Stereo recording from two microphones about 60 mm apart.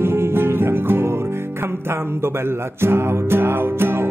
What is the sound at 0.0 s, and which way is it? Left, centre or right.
Music, right.